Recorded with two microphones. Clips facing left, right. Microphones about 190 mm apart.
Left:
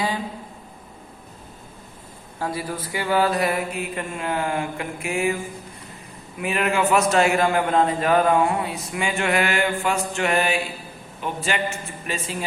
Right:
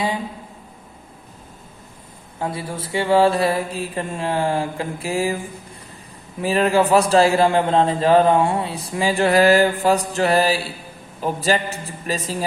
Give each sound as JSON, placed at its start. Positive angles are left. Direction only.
{"t": 2.4, "sound": "a man's voice", "side_deg": -25}
{"t": 6.4, "sound": "a man's voice", "side_deg": -30}